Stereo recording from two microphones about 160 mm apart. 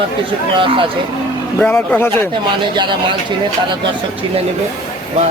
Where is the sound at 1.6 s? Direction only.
10° left (ahead or behind).